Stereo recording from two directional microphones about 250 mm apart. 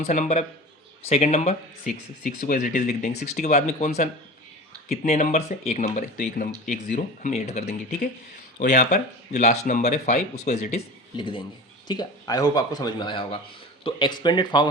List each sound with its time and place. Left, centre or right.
0.0 s a man's voice: left